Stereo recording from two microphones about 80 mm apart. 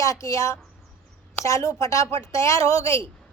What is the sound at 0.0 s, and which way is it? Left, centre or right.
A woman's voice, left.